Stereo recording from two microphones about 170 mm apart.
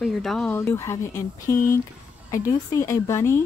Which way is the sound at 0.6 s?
15° left (ahead or behind).